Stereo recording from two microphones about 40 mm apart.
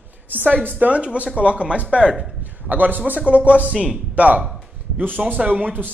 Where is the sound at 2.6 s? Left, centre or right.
Right.